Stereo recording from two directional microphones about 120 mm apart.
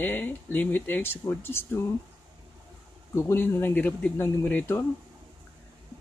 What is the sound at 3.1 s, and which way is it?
Speech, 20° left (ahead or behind).